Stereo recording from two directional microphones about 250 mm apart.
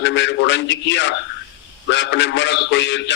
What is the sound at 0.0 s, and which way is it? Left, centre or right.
A man's voice, left.